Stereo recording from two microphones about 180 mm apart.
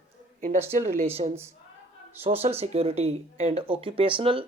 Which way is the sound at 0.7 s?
40° right (ahead or behind).